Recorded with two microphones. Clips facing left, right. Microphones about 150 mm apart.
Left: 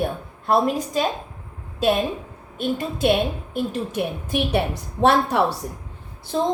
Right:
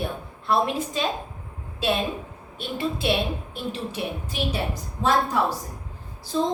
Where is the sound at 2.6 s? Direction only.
45° left (ahead or behind); by 5.5 s 70° left (ahead or behind).